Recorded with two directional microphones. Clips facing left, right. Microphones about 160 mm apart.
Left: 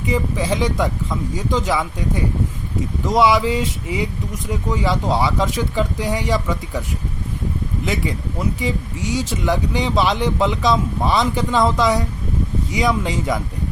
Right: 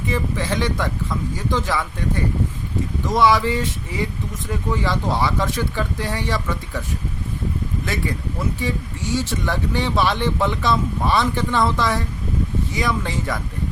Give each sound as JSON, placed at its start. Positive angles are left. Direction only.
{"t": 0.1, "sound": "speech", "side_deg": 15}
{"t": 8.6, "sound": "speech", "side_deg": 15}